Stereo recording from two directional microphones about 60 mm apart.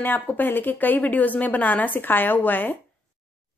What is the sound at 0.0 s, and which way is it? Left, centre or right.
A woman's voice, left.